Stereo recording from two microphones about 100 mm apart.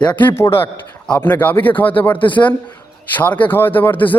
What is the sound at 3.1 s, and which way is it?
Speech, 15° left (ahead or behind).